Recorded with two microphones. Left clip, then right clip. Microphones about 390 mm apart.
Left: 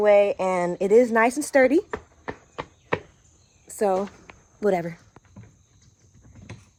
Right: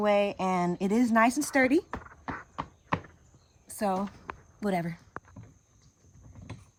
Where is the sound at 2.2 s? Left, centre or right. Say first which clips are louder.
Left 2 dB; centre.